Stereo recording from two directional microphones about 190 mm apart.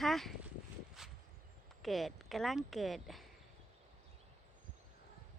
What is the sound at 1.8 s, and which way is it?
Speech, centre (ahead or behind).